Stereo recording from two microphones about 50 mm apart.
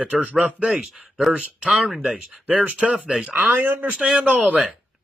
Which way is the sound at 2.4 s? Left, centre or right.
Right.